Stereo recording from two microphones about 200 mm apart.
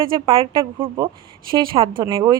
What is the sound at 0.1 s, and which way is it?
A woman's voice, 25° right (ahead or behind).